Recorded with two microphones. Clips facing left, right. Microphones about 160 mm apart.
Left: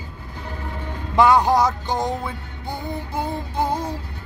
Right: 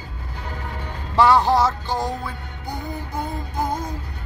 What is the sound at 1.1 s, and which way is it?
Music, 15° left (ahead or behind).